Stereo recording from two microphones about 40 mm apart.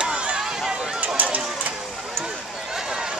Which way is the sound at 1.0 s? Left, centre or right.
Right.